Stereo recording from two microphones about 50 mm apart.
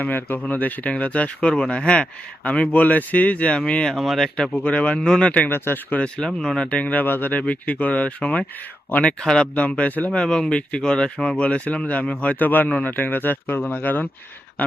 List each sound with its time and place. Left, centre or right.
0.0 s speech: left
3.9 s speech: centre
4.6 s speech: left
4.9 s speech: centre
5.2 s speech: left
5.5 s speech: left
6.0 s speech: centre
6.7 s speech: left
7.0 s speech: left
9.0 s speech: centre
9.6 s speech: left
10.1 s speech: centre; by 14.1 s left